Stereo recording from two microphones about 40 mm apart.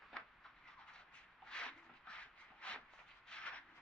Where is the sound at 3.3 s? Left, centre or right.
Left.